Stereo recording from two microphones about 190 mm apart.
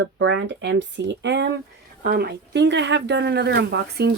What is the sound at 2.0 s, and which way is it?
Speech, 55° right (ahead or behind).